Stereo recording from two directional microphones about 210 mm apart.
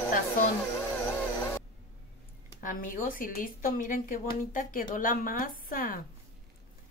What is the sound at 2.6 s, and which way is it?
A woman's voice, 40° left (ahead or behind).